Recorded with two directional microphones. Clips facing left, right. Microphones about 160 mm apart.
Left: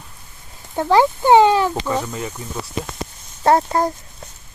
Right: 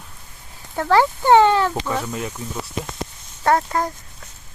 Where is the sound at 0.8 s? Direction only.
15° left (ahead or behind).